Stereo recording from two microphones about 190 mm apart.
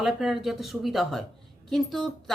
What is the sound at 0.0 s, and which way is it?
A woman's voice, centre (ahead or behind).